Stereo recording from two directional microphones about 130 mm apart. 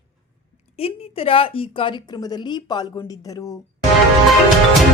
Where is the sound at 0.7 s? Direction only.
50° left (ahead or behind); by 3.5 s 25° left (ahead or behind).